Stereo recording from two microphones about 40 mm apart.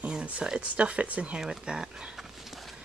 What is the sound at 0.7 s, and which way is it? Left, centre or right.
Speech, right.